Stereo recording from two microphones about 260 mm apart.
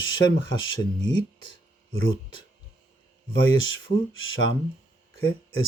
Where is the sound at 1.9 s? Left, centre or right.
Left.